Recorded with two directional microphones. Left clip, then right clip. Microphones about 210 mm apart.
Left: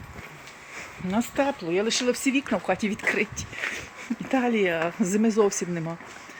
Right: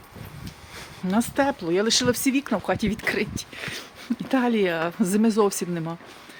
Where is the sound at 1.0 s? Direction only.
45° right (ahead or behind).